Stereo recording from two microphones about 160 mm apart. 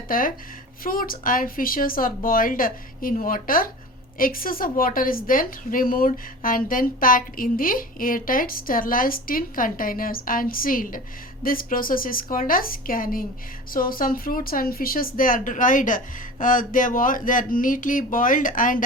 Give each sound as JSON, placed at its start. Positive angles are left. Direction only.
{"t": 0.1, "sound": "a woman's voice", "side_deg": 60}